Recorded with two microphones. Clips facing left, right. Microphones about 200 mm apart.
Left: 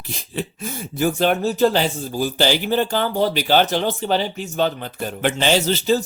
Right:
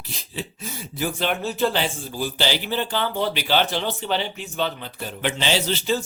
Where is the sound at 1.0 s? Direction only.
45° left (ahead or behind).